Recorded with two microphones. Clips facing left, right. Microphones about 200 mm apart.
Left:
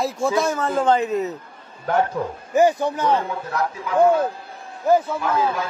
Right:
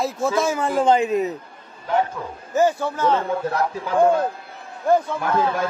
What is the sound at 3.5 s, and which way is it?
Speech, 35° right (ahead or behind).